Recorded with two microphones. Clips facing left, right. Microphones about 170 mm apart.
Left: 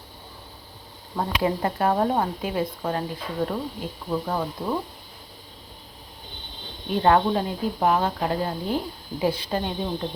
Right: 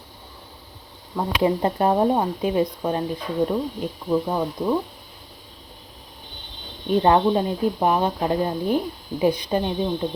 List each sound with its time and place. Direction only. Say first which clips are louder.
1.4 s speech: right 4 dB; 20° right (ahead or behind)
6.9 s speech: right 2 dB; 20° right (ahead or behind)